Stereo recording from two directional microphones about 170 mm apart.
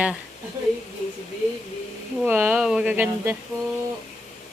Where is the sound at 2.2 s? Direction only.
10° right (ahead or behind).